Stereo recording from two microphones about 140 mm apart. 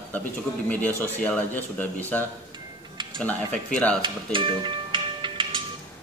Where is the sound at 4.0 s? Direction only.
35° right (ahead or behind).